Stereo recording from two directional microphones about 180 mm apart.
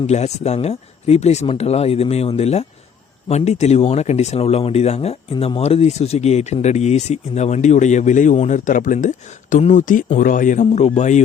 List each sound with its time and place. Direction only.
0.1 s speech: 35° left (ahead or behind)